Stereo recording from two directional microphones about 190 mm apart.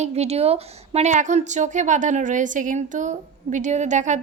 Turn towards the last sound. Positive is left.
turn(degrees=-40)  # may be behind; listen again after turning